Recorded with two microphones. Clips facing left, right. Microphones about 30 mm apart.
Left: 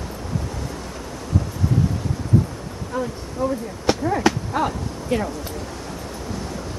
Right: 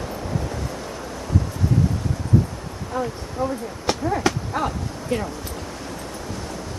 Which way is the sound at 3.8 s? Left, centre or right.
Centre.